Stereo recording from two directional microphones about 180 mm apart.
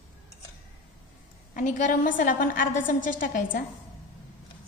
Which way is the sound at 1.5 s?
45° left (ahead or behind).